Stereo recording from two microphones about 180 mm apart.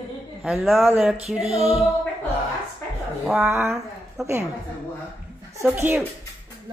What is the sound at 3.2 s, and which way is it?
Speech, 10° right (ahead or behind).